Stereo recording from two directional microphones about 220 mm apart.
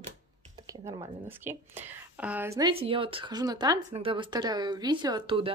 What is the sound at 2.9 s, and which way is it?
A woman's voice, 25° right (ahead or behind).